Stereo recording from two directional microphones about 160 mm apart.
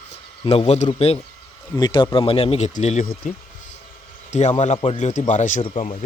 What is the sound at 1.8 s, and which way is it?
Speech, 25° left (ahead or behind).